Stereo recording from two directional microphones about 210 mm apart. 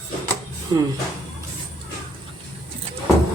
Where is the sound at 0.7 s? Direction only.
20° right (ahead or behind).